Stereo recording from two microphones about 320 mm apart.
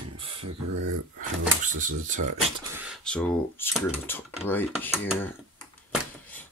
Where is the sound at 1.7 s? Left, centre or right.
Right.